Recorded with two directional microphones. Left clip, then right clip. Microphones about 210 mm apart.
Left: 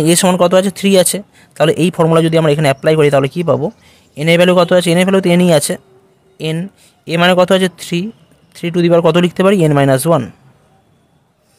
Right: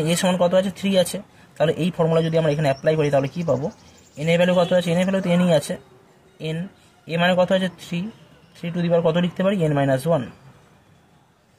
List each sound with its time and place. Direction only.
0.0 s a man's voice: 50° left (ahead or behind)